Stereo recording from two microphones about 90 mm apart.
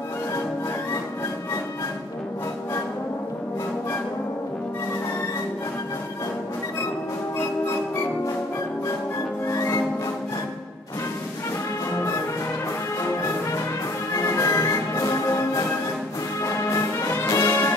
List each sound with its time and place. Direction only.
9.5 s music: 40° left (ahead or behind)
14.1 s music: 35° left (ahead or behind)
16.4 s brass instrument: 35° left (ahead or behind)